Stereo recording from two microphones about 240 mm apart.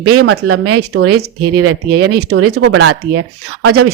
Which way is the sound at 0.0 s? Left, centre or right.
Right.